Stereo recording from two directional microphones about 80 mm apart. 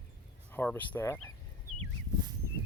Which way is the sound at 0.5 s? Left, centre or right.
Left.